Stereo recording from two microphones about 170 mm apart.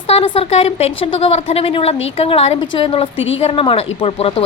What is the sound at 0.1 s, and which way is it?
A woman's voice, 35° left (ahead or behind).